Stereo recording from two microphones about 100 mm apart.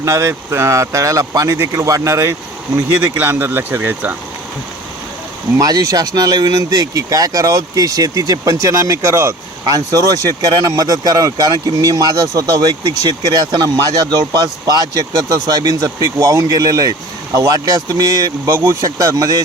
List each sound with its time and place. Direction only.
0.0 s speech: 30° right (ahead or behind)
5.5 s speech: 35° right (ahead or behind)